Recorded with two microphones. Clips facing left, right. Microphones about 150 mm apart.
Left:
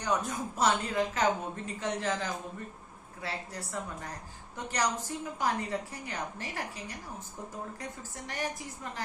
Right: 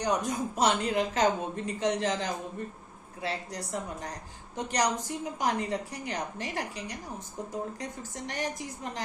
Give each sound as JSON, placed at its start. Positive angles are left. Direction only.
{"t": 0.0, "sound": "a woman's voice", "side_deg": -15}